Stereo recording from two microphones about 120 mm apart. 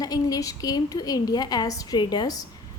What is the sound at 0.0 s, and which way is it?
A woman's voice, 30° left (ahead or behind).